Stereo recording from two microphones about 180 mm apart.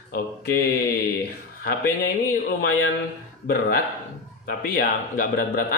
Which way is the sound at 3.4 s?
55° left (ahead or behind).